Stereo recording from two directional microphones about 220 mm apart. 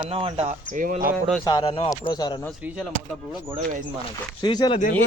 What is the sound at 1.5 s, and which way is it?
Speech, 20° left (ahead or behind).